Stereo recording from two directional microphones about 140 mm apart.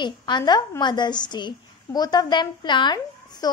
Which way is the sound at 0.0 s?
30° left (ahead or behind).